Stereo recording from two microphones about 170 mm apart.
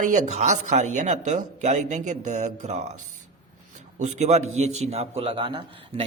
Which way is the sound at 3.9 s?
45° right (ahead or behind).